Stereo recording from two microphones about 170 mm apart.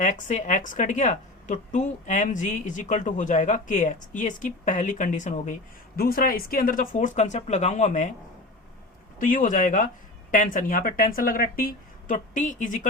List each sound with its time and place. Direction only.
0.0 s a woman's voice: 45° left (ahead or behind)
6.0 s a woman's voice: 60° left (ahead or behind)
9.1 s a woman's voice: 50° left (ahead or behind)